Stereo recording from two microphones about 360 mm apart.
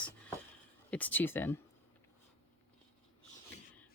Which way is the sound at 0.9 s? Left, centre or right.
Centre.